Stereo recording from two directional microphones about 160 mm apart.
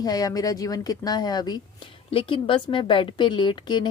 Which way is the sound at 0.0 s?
25° left (ahead or behind).